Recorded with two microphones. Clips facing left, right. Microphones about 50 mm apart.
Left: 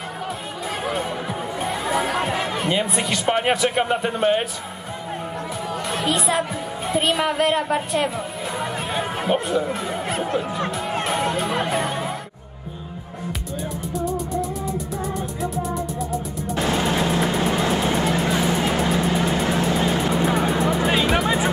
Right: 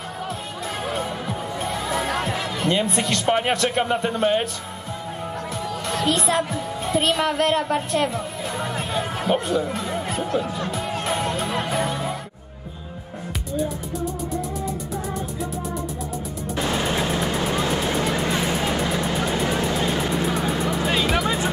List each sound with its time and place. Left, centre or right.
1.6 s music: centre
2.6 s a man's voice: centre
5.9 s music: centre
6.9 s a man's voice: centre
8.5 s music: centre
9.5 s speech: centre
10.2 s music: left
11.1 s music: centre
13.6 s music: centre
17.2 s vehicle: centre
19.8 s music: centre